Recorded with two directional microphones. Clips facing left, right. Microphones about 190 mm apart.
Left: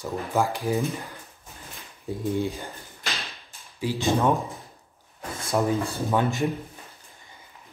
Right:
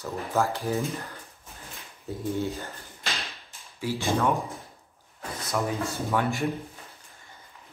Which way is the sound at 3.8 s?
15° left (ahead or behind).